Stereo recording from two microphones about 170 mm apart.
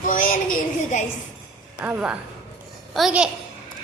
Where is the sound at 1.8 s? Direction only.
5° right (ahead or behind).